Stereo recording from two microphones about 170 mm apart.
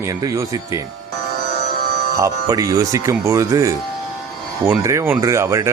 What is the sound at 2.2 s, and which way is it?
Speech, 20° right (ahead or behind).